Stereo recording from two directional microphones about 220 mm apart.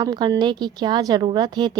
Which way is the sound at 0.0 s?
20° right (ahead or behind).